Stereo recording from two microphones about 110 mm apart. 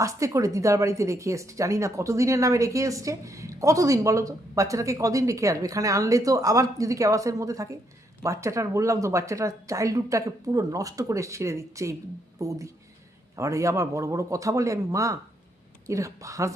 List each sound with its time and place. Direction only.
0.0 s a woman's voice: 30° right (ahead or behind)